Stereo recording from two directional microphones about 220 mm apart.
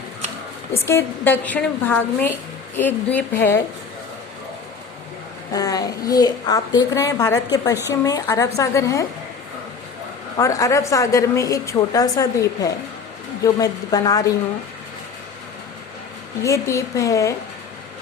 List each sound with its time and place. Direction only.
0.9 s a woman's voice: 10° left (ahead or behind)
5.5 s a woman's voice: 15° left (ahead or behind)
10.3 s a woman's voice: 15° left (ahead or behind)
16.4 s a woman's voice: 15° left (ahead or behind)